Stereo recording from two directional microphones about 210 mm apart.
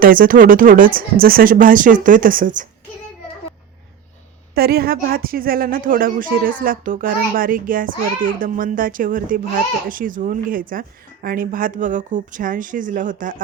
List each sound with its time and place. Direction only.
0.0 s speech: 40° right (ahead or behind)
4.5 s speech: 45° right (ahead or behind)